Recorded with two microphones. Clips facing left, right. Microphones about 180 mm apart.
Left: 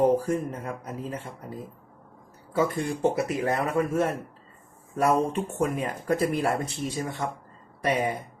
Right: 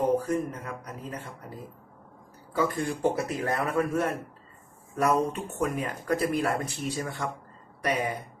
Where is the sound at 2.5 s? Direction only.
20° left (ahead or behind).